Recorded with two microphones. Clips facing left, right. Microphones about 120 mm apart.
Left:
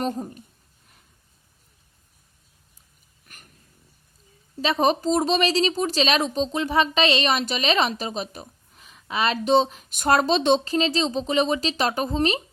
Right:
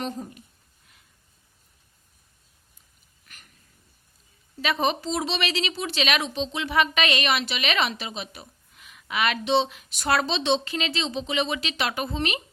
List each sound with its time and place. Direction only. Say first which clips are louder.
0.0 s a woman's voice: left 5 dB; 40° left (ahead or behind)
3.2 s a sound: left 2 dB; 45° left (ahead or behind)
4.6 s a woman's voice: left 4 dB; 35° left (ahead or behind)